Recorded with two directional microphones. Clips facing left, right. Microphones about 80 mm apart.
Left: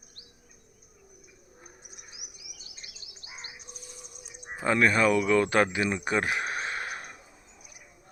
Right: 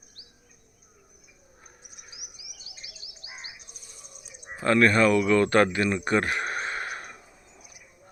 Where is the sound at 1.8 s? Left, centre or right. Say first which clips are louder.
Even; centre.